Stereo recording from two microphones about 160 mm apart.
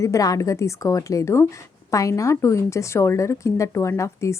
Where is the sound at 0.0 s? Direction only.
20° left (ahead or behind).